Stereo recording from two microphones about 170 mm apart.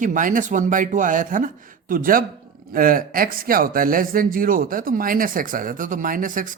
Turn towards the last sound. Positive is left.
turn(degrees=-50)  # may be behind; listen again after turning